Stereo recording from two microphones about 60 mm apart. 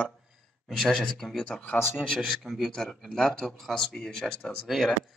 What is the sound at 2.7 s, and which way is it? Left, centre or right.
Speech, centre.